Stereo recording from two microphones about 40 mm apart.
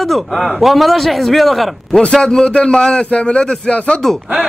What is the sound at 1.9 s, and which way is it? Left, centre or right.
A man's voice, left.